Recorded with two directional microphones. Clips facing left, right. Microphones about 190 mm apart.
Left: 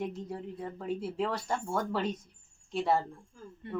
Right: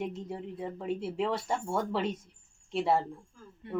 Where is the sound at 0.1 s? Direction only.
25° right (ahead or behind).